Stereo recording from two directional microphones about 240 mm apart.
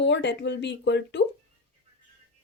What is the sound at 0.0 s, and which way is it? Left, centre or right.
Speech, left.